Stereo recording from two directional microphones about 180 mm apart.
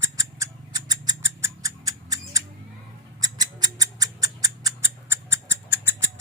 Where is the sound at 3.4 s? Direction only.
20° right (ahead or behind).